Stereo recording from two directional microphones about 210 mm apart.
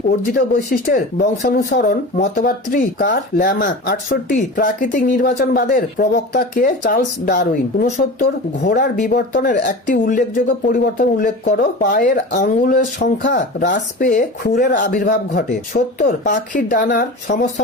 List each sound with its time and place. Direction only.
0.3 s speech: 40° left (ahead or behind)
8.6 s speech: 50° left (ahead or behind)
9.0 s speech: 40° left (ahead or behind)
12.3 s speech: 40° left (ahead or behind)
13.2 s speech: 55° left (ahead or behind)
13.7 s speech: 35° left (ahead or behind)